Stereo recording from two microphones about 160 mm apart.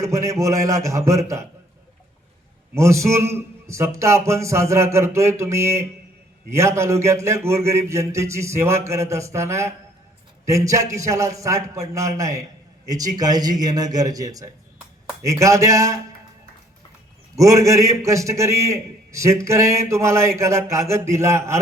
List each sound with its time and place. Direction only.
0.0 s a man's voice: 20° right (ahead or behind)
2.7 s a man's voice: 20° right (ahead or behind)
17.3 s a man's voice: 20° right (ahead or behind)